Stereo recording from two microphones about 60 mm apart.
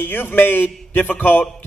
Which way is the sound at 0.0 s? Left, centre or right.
Left.